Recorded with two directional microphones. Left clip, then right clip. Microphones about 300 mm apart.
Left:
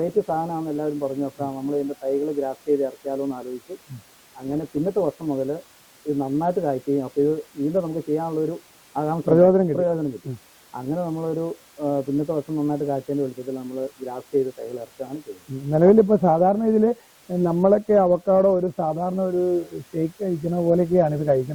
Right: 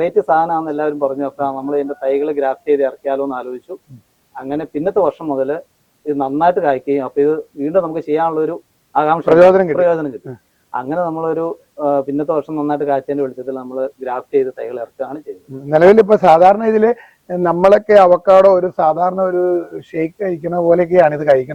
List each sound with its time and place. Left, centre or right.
0.0 s a man's voice: centre
15.7 s a man's voice: centre